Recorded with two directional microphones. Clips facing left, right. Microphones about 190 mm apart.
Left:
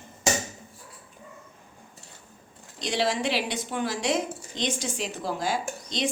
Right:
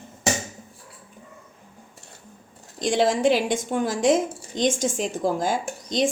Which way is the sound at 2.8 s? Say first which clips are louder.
Right 6 dB; 50° right (ahead or behind).